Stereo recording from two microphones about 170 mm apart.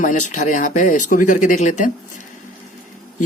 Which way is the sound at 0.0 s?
45° left (ahead or behind).